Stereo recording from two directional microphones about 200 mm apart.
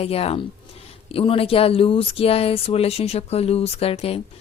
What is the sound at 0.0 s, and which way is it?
Speech, 30° left (ahead or behind).